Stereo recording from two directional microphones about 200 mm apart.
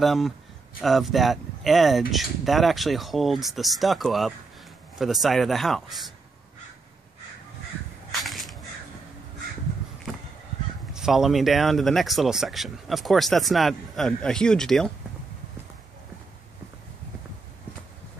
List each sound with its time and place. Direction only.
0.0 s speech: centre (ahead or behind)
8.2 s a sound: centre (ahead or behind)
10.9 s speech: 5° right (ahead or behind)